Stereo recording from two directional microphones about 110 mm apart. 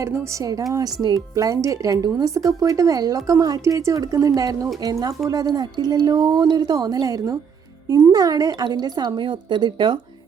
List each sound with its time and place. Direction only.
0.0 s a woman's voice: 30° right (ahead or behind); by 10.0 s 45° right (ahead or behind)